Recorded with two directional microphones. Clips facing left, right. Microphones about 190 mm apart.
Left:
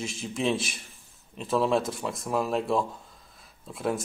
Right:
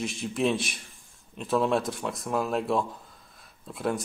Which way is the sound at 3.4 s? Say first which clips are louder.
Even; centre (ahead or behind).